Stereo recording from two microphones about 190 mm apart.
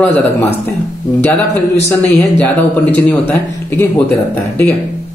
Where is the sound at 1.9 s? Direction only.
10° left (ahead or behind).